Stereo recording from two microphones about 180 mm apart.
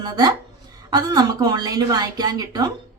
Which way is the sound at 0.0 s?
20° right (ahead or behind).